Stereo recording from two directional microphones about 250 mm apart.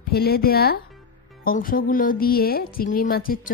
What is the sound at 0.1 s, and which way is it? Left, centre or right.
A woman's voice, left.